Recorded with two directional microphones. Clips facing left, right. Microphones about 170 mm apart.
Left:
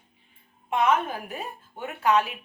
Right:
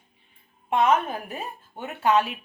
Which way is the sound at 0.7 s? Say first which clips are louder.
Right 2 dB; 30° right (ahead or behind).